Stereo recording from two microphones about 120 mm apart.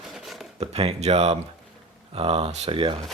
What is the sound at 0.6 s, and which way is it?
Speech, 60° right (ahead or behind).